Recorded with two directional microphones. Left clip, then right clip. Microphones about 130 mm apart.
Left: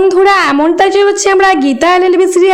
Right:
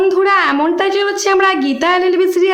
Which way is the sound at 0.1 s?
50° left (ahead or behind).